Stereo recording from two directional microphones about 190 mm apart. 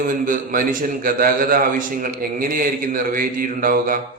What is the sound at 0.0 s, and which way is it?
A man's voice, 45° right (ahead or behind).